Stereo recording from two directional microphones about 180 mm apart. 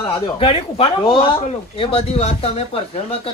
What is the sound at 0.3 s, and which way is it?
Speech, 30° left (ahead or behind).